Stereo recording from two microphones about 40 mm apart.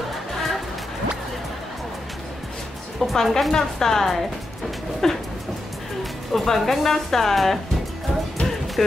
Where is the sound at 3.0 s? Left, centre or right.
Centre.